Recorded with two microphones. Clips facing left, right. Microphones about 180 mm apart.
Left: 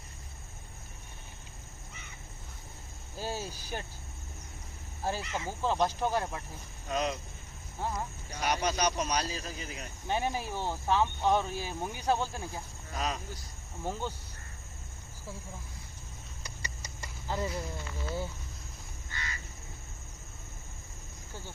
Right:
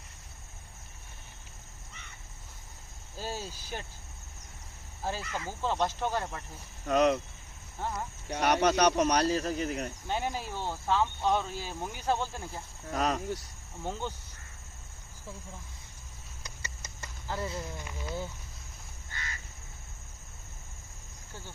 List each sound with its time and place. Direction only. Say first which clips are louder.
3.2 s speech: left 1 dB; 15° left (ahead or behind)
5.0 s speech: left 1 dB; 15° left (ahead or behind)
6.8 s speech: right 8 dB; 65° right (ahead or behind)
7.8 s speech: even; 10° left (ahead or behind)
8.3 s speech: right 6 dB; 70° right (ahead or behind)
10.1 s speech: left 3 dB; 15° left (ahead or behind)
12.9 s speech: right 6 dB; 60° right (ahead or behind)
16.4 s a sound: left 1 dB; 10° left (ahead or behind)
17.7 s speech: left 1 dB; 15° right (ahead or behind)